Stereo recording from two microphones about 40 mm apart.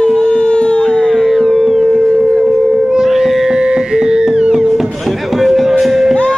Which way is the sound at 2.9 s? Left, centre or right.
Centre.